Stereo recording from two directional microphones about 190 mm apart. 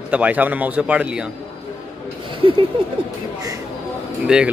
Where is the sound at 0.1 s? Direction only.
10° right (ahead or behind).